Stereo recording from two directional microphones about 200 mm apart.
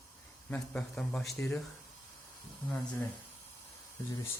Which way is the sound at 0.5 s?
5° left (ahead or behind).